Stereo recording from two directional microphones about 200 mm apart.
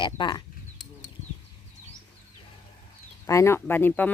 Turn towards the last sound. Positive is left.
turn(degrees=10)  # may be behind; listen again after turning